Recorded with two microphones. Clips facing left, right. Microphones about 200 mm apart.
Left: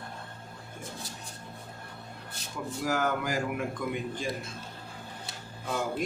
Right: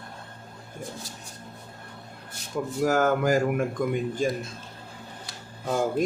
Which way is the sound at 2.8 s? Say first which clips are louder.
Right 7 dB; 50° right (ahead or behind).